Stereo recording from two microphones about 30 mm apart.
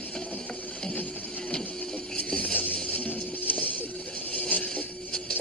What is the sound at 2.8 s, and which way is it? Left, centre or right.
Music, left.